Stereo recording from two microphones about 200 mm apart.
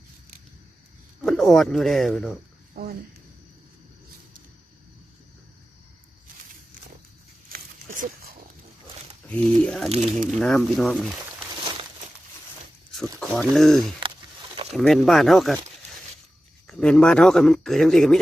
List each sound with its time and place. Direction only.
1.2 s speech: centre (ahead or behind)
7.5 s a sound: 45° right (ahead or behind)
9.3 s speech: 5° left (ahead or behind)
13.1 s speech: centre (ahead or behind)
16.6 s speech: 5° left (ahead or behind)